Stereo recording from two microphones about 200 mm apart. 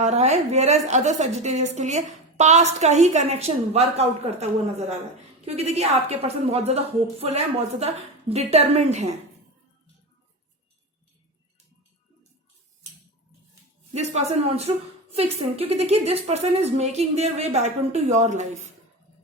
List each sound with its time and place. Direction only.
0.0 s a woman's voice: 35° right (ahead or behind)
13.9 s a woman's voice: 35° right (ahead or behind)